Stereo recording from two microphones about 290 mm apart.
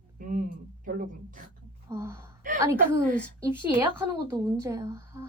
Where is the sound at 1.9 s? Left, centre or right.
Centre.